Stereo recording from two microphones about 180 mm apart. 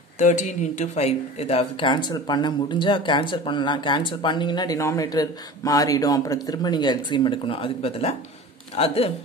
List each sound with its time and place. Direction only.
0.2 s speech: 40° left (ahead or behind)